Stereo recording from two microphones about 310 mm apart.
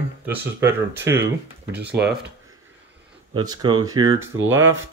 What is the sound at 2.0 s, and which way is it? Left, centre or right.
Speech, right.